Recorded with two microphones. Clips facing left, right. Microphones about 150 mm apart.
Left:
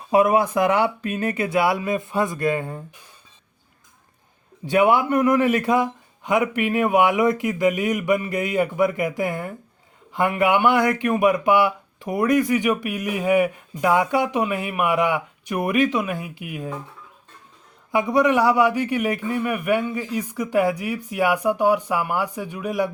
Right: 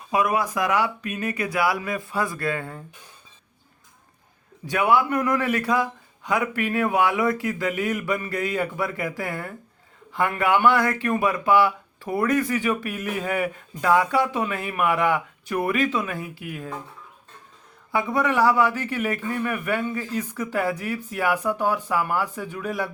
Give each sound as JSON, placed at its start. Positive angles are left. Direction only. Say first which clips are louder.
{"t": 0.1, "sound": "a man's voice", "louder": "left 6 dB", "side_deg": 30}
{"t": 4.6, "sound": "a man's voice", "louder": "left 3 dB", "side_deg": 25}
{"t": 17.9, "sound": "speech", "louder": "left 4 dB", "side_deg": 15}